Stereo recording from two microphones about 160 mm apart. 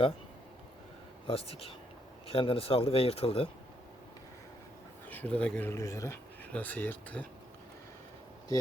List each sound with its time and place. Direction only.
1.3 s speech: 35° left (ahead or behind)
5.0 s speech: 10° left (ahead or behind)